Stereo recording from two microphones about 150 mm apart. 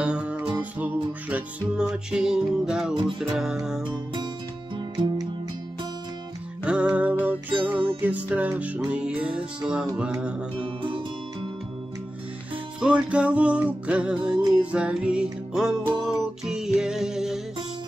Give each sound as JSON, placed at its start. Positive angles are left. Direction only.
{"t": 0.0, "sound": "music", "side_deg": -5}
{"t": 4.7, "sound": "music", "side_deg": -30}
{"t": 6.6, "sound": "music", "side_deg": -5}
{"t": 10.8, "sound": "music", "side_deg": -35}
{"t": 12.8, "sound": "music", "side_deg": -10}